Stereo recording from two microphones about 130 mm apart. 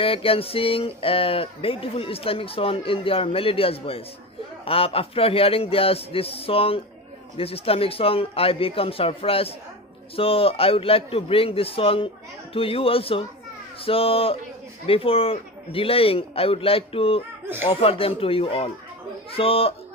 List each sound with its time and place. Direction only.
0.0 s speech: 45° left (ahead or behind)